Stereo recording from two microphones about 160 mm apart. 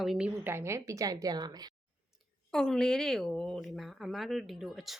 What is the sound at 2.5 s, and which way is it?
Speech, 5° left (ahead or behind).